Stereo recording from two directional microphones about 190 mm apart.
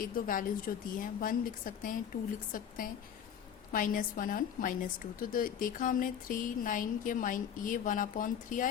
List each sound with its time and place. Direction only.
0.0 s speech: 45° left (ahead or behind)